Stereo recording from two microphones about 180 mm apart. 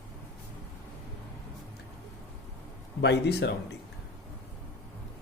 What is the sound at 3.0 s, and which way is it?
Speech, 70° left (ahead or behind).